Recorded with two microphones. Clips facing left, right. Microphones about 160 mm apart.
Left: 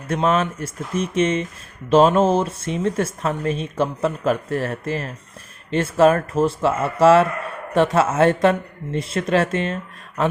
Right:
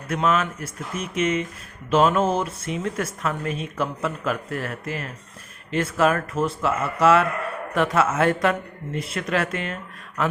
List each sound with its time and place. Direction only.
0.1 s speech: 30° left (ahead or behind)